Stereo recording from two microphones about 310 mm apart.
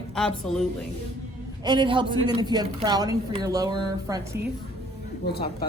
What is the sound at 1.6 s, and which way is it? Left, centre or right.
A woman's voice, centre.